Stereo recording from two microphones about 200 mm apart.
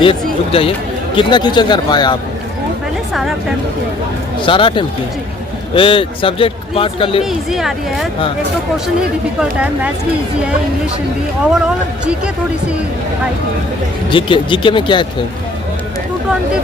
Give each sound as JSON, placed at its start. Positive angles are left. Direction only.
{"t": 0.0, "sound": "a man's voice", "side_deg": 25}
{"t": 4.4, "sound": "a man's voice", "side_deg": 25}
{"t": 7.3, "sound": "speech", "side_deg": 0}
{"t": 9.4, "sound": "speech", "side_deg": -5}
{"t": 14.1, "sound": "a man's voice", "side_deg": 25}